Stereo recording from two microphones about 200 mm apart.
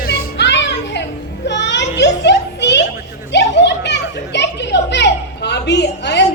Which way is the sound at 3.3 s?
60° left (ahead or behind).